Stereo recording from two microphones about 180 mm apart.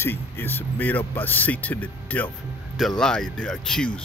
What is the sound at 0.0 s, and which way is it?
Speech, 10° left (ahead or behind).